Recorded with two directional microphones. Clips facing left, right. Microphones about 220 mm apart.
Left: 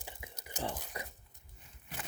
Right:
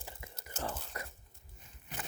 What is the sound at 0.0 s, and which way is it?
Whispering, 15° left (ahead or behind).